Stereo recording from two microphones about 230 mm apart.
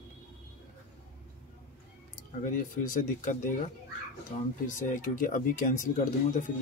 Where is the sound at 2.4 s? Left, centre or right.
Left.